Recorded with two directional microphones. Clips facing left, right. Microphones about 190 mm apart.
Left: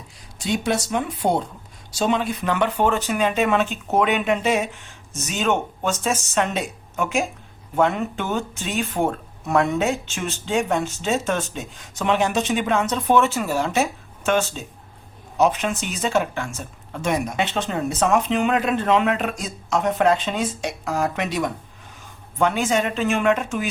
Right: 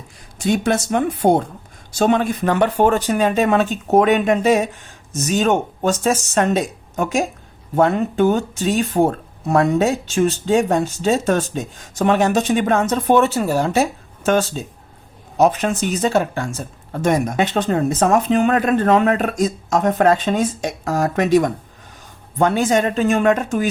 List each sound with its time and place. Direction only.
0.4 s speech: 50° right (ahead or behind)